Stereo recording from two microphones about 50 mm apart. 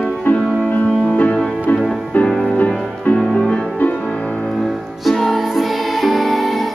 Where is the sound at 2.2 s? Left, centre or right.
Centre.